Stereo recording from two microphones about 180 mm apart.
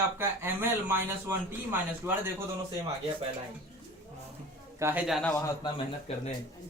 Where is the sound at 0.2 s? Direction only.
10° right (ahead or behind).